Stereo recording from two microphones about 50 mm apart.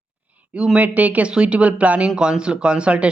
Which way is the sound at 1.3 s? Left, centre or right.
Right.